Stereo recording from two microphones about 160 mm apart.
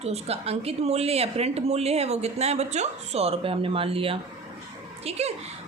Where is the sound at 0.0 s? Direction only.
40° right (ahead or behind).